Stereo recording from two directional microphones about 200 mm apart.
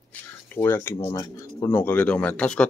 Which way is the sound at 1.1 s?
25° left (ahead or behind).